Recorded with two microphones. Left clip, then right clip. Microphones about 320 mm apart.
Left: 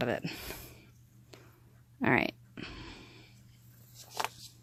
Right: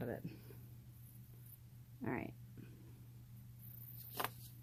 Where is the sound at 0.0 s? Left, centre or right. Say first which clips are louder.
Left 13 dB; left.